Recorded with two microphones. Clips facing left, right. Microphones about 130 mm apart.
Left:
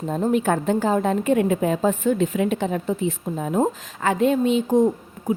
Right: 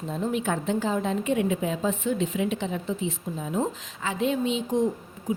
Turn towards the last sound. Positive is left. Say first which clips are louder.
# left 6 dB
turn(degrees=50)  # may be behind; listen again after turning